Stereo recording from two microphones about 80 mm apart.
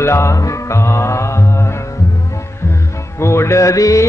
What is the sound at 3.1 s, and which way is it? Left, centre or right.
Music, left.